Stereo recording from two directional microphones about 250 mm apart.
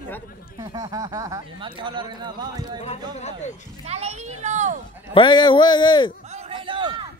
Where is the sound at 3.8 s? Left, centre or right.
Right.